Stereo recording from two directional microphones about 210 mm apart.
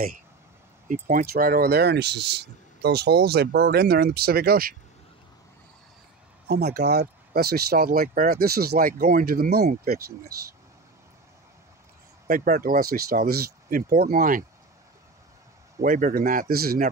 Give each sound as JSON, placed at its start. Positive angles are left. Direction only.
{"t": 0.8, "sound": "speech", "side_deg": -40}
{"t": 6.4, "sound": "speech", "side_deg": -50}
{"t": 12.3, "sound": "speech", "side_deg": -45}
{"t": 15.8, "sound": "a man's voice", "side_deg": -40}